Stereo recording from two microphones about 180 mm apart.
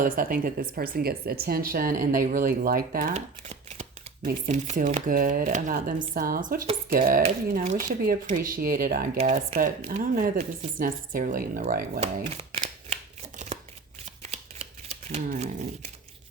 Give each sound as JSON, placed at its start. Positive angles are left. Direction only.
{"t": 0.0, "sound": "speech", "side_deg": -50}
{"t": 3.2, "sound": "shuffling cards", "side_deg": -40}
{"t": 4.4, "sound": "speech", "side_deg": -40}
{"t": 9.1, "sound": "speech", "side_deg": -40}
{"t": 14.0, "sound": "shuffling cards", "side_deg": -35}